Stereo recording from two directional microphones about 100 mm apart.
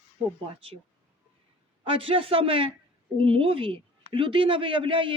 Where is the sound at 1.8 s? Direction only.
60° right (ahead or behind).